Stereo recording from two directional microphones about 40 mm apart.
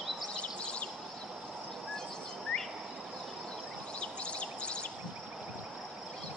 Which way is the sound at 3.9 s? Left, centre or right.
Left.